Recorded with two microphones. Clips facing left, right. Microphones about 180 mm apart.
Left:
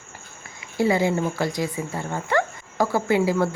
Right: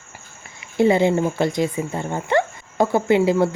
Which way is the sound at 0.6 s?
25° right (ahead or behind).